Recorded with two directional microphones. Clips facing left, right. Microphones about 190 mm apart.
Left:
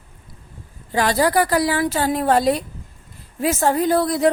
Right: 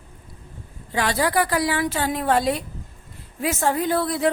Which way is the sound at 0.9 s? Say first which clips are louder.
Left 4 dB; 40° left (ahead or behind).